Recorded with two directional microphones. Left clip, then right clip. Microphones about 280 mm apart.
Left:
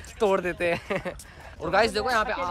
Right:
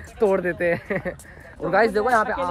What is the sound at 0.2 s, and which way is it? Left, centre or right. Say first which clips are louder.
Speech: right 3 dB; centre.